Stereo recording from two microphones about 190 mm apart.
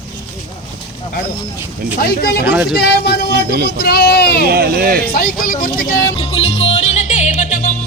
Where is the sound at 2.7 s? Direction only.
60° left (ahead or behind).